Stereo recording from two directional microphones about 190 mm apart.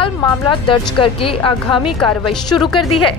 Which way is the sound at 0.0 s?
25° left (ahead or behind).